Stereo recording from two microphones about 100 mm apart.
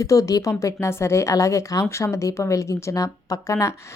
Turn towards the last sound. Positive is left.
turn(degrees=30)  # may be behind; listen again after turning